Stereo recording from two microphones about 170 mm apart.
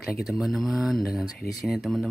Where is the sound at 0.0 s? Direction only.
Centre (ahead or behind).